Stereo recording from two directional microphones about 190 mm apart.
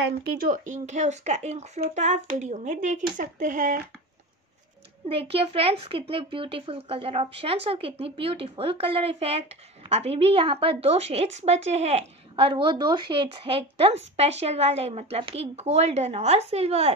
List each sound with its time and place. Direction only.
0.5 s a woman's voice: 40° right (ahead or behind)
5.0 s a woman's voice: 30° right (ahead or behind)